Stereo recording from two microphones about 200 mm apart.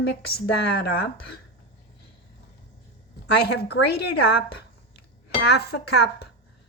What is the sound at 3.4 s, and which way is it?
Speech, 55° left (ahead or behind).